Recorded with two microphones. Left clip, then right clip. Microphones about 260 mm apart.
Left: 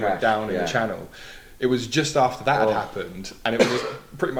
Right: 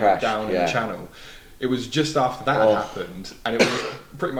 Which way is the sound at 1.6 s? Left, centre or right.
Left.